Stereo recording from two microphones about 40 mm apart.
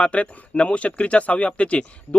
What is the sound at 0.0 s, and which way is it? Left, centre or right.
Speech, left.